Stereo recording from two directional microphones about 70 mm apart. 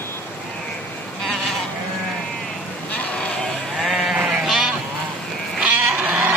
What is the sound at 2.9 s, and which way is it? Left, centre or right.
Sheep, centre.